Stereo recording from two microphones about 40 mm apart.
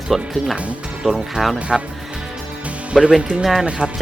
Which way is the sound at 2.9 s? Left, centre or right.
Right.